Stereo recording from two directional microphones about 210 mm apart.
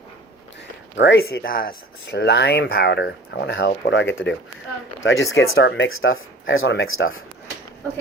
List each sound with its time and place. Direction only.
0.9 s speech: 55° left (ahead or behind); by 7.2 s 75° left (ahead or behind)